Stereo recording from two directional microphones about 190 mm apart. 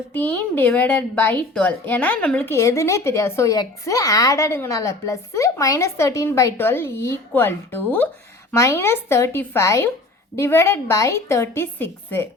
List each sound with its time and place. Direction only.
0.1 s a woman's voice: 10° left (ahead or behind)